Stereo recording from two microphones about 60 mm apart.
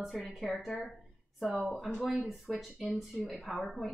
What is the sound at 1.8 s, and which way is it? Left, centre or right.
Speech, centre.